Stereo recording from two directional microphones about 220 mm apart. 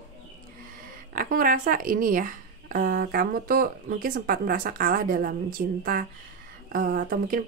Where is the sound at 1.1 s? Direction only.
40° right (ahead or behind).